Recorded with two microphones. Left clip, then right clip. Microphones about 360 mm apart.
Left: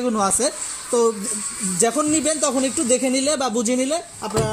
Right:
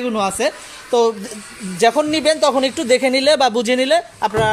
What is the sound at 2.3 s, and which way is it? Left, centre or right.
Speech, right.